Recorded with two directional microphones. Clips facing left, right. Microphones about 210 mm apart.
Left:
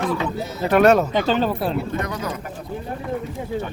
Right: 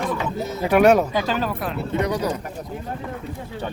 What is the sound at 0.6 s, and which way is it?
Speech, 10° right (ahead or behind).